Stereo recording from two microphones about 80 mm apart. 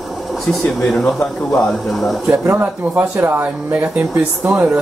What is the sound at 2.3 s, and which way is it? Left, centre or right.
Speech, right.